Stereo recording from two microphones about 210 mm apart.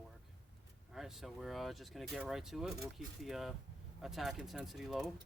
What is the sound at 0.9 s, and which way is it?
Speech, centre (ahead or behind).